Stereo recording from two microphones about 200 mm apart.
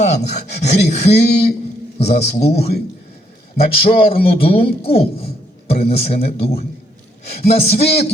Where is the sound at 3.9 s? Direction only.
30° left (ahead or behind).